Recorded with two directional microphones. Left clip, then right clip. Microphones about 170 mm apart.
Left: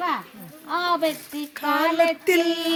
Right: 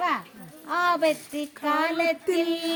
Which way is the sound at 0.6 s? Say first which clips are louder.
Even; 40° right (ahead or behind).